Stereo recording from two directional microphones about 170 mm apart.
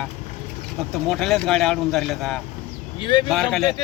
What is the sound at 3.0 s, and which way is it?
Speech, 30° left (ahead or behind).